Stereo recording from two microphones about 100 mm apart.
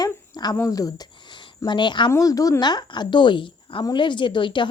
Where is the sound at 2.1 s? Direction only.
35° left (ahead or behind).